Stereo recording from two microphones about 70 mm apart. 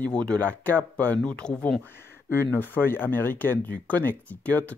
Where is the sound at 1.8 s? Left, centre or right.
Left.